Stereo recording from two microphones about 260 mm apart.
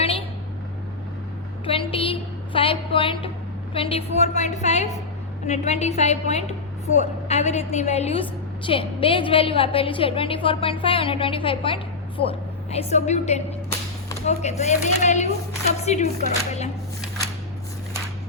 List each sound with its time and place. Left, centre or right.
1.6 s a woman's voice: left